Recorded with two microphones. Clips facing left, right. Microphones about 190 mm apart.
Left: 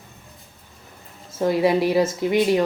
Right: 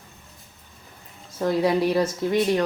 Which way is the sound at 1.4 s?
5° left (ahead or behind).